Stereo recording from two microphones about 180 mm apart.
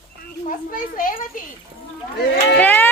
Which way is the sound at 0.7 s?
50° left (ahead or behind).